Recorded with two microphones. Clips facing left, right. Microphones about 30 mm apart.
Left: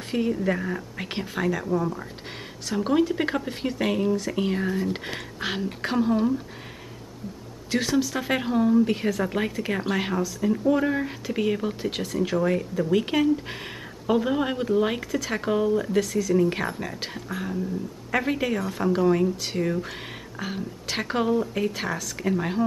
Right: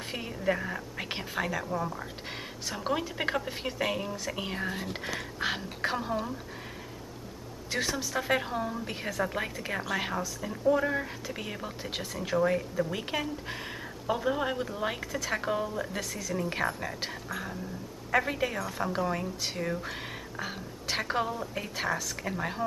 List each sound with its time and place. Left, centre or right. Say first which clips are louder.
0.1 s a woman's voice: left 7 dB; centre
7.7 s a woman's voice: left 7 dB; centre
15.0 s a woman's voice: left 7 dB; centre
15.2 s a woman's voice: left 6 dB; centre
16.3 s a woman's voice: left 3 dB; centre